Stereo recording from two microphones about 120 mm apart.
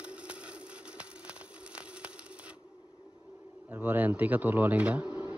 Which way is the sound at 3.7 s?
15° right (ahead or behind).